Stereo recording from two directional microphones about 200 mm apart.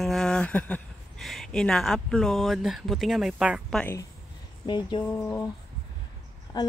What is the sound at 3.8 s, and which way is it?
Speech, 10° left (ahead or behind).